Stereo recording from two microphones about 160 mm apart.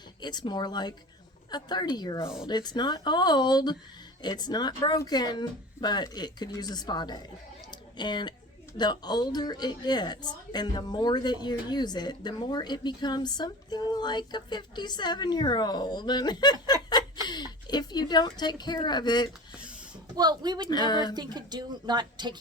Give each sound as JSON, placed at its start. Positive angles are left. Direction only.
{"t": 0.2, "sound": "a woman's voice", "side_deg": 25}
{"t": 7.7, "sound": "a sound", "side_deg": 30}
{"t": 8.8, "sound": "a woman's voice", "side_deg": 25}
{"t": 20.1, "sound": "speech", "side_deg": -25}
{"t": 20.7, "sound": "a woman's voice", "side_deg": 25}
{"t": 21.2, "sound": "speech", "side_deg": -25}